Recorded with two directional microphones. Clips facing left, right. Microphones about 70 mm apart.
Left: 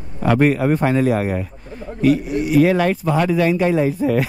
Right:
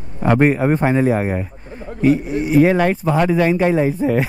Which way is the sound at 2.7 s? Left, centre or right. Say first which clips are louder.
Right 1 dB; centre.